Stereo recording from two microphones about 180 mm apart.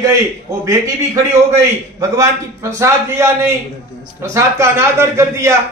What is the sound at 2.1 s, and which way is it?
A man's voice, 15° right (ahead or behind).